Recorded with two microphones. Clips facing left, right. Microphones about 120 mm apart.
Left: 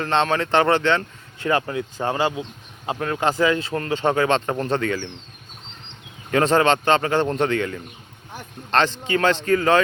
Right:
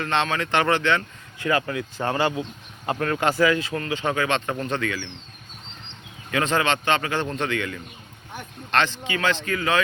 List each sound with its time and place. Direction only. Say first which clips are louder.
0.0 s speech: left 4 dB; 30° left (ahead or behind)
2.0 s speech: left 1 dB; 15° left (ahead or behind); by 5.0 s 35° left (ahead or behind)
6.3 s speech: left 5 dB; 40° left (ahead or behind)